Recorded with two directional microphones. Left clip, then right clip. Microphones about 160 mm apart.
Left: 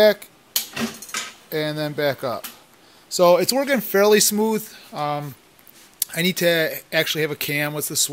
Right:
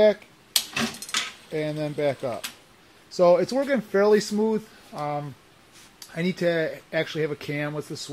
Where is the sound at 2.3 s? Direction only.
35° left (ahead or behind).